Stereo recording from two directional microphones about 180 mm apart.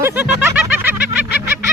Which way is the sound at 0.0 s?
10° right (ahead or behind).